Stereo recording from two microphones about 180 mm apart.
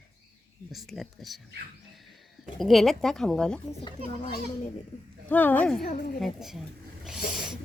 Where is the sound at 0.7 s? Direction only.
Centre (ahead or behind).